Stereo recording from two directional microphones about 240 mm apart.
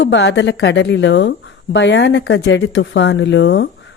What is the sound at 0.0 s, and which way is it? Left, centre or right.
Speech, left.